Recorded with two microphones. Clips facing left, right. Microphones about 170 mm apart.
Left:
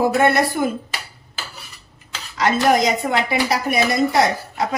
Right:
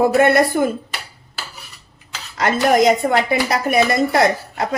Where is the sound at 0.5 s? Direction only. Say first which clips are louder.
Right 3 dB; 45° right (ahead or behind).